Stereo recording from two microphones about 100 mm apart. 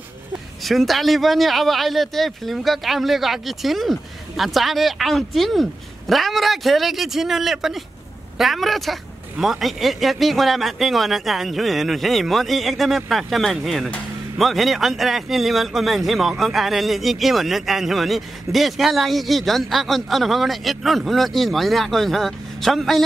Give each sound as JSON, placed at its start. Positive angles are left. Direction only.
{"t": 0.7, "sound": "a man's voice", "side_deg": 0}